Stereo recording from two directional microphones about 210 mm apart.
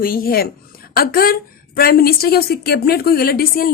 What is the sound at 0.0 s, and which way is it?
A woman's voice, 45° left (ahead or behind).